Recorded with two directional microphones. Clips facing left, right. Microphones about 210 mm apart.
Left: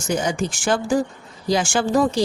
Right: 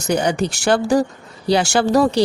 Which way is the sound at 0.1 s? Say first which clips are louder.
Right 4 dB; 65° right (ahead or behind).